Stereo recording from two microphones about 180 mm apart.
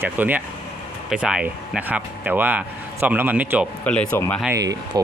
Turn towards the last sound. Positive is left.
turn(degrees=-20)  # may be behind; listen again after turning